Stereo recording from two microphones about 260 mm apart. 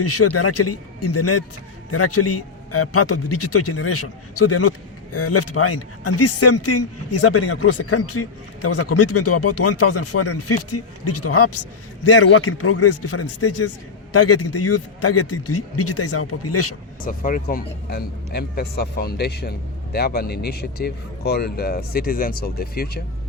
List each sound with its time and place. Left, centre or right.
0.0 s speech: left
17.0 s speech: left